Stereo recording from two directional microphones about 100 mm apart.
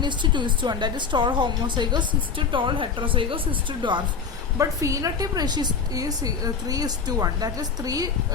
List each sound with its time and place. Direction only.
0.0 s a woman's voice: 50° right (ahead or behind)
4.5 s a woman's voice: 30° right (ahead or behind)